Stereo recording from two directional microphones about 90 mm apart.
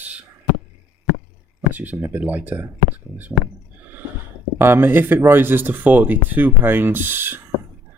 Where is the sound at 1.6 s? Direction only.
20° right (ahead or behind).